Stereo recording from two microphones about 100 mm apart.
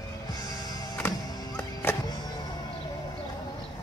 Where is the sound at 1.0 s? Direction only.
15° left (ahead or behind).